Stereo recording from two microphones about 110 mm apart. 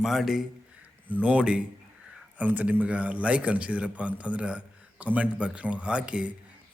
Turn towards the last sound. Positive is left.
turn(degrees=-10)  # may be behind; listen again after turning